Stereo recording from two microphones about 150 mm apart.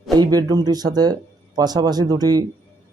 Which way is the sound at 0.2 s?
25° right (ahead or behind).